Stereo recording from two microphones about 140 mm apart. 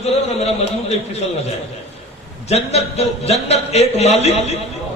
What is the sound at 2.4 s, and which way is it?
A man's voice, 50° left (ahead or behind).